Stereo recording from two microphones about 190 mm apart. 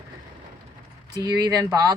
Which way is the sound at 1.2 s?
20° right (ahead or behind).